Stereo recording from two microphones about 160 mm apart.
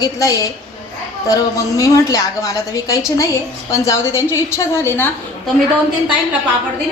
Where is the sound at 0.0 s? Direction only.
25° left (ahead or behind).